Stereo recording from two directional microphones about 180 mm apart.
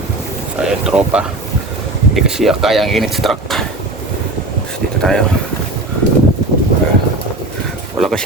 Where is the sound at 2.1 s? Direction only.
Centre (ahead or behind).